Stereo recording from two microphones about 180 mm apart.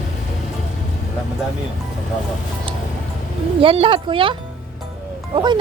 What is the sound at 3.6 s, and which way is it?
Speech, 30° right (ahead or behind).